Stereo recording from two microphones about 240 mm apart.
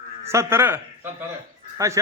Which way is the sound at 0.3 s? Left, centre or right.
Centre.